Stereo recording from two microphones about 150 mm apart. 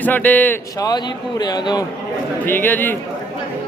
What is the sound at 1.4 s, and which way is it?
Speech, 25° left (ahead or behind).